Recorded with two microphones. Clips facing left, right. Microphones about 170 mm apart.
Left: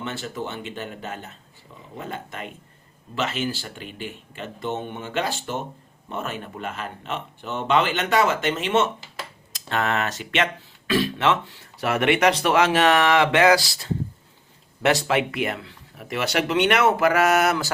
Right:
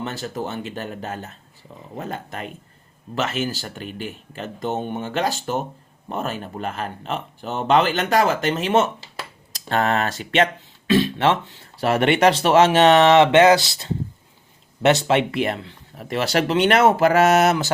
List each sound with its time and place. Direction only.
0.0 s speech: 40° right (ahead or behind)